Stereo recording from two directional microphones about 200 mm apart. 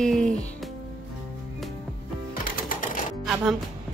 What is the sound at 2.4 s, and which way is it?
Sewing machine, 40° left (ahead or behind).